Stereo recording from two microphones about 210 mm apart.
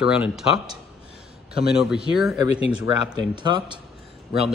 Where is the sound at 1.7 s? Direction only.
5° right (ahead or behind).